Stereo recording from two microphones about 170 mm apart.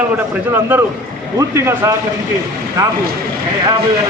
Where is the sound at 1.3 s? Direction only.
15° right (ahead or behind).